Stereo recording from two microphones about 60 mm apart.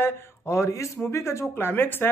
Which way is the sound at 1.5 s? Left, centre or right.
Left.